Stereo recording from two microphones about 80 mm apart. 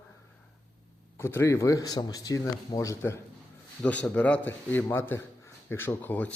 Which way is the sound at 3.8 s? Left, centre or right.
Centre.